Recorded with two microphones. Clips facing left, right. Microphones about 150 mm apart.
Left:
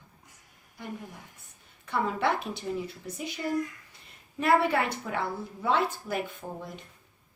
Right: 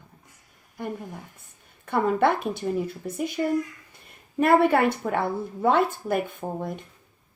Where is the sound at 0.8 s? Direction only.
55° right (ahead or behind).